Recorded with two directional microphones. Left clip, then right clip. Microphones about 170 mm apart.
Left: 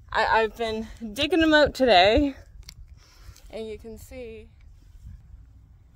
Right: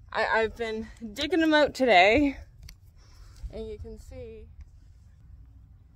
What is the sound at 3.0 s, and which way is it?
Speech, 35° left (ahead or behind).